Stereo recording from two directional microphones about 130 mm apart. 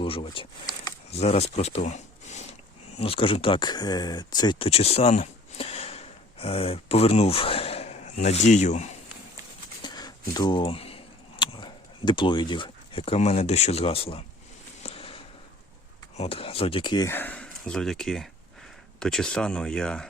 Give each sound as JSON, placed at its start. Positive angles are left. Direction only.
{"t": 0.0, "sound": "speech", "side_deg": 45}
{"t": 1.1, "sound": "speech", "side_deg": 55}
{"t": 1.8, "sound": "a sound", "side_deg": 60}
{"t": 3.0, "sound": "speech", "side_deg": 45}
{"t": 9.8, "sound": "a sound", "side_deg": 30}
{"t": 16.1, "sound": "speech", "side_deg": 50}
{"t": 17.1, "sound": "speech", "side_deg": 15}